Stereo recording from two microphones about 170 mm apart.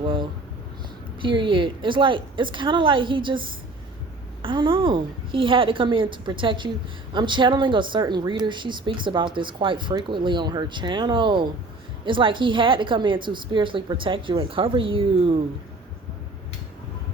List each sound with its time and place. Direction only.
0.0 s a sound: 30° right (ahead or behind)
1.2 s speech: 30° right (ahead or behind)
4.4 s speech: 30° right (ahead or behind)